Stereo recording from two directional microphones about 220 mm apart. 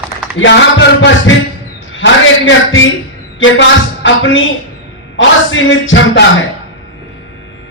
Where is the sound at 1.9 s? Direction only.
60° left (ahead or behind).